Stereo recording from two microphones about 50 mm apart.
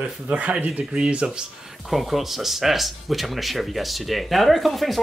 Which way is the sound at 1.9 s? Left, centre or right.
Centre.